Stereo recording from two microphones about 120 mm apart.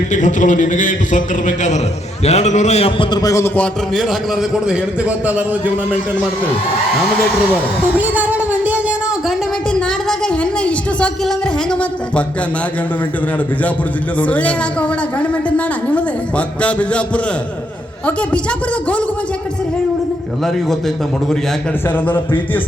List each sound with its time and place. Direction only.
0.1 s a man's voice: 90° left
2.2 s a man's voice: 70° left (ahead or behind)
3.0 s a man's voice: 35° left (ahead or behind)
3.9 s a man's voice: centre (ahead or behind)
7.9 s a sound: 15° right (ahead or behind)
9.7 s a woman's voice: 5° left (ahead or behind)
14.2 s a woman's voice: 10° left (ahead or behind)
18.0 s a woman's voice: 10° left (ahead or behind)
20.4 s a man's voice: 5° left (ahead or behind)
21.8 s a woman's voice: 20° left (ahead or behind)